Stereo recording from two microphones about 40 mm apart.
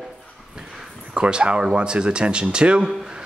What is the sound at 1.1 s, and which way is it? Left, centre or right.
Speech, right.